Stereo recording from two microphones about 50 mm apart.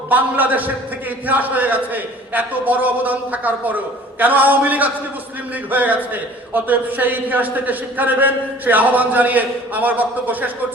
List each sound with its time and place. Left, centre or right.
0.1 s a man's voice: right